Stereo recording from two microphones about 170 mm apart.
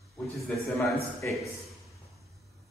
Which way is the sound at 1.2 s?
10° left (ahead or behind).